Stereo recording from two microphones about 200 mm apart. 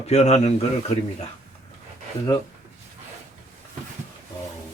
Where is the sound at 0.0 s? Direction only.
30° left (ahead or behind).